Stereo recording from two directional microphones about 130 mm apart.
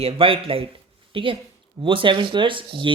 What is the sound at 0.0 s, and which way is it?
A woman's voice, 45° right (ahead or behind).